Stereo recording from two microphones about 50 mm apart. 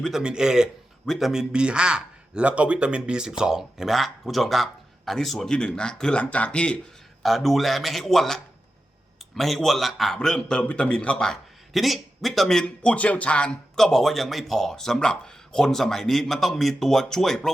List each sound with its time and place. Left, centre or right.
0.2 s speech: centre
5.5 s speech: centre
6.1 s a man's voice: left
7.2 s speech: centre
10.2 s speech: centre
10.6 s a man's voice: left
11.7 s speech: centre; by 13.6 s left
13.7 s speech: centre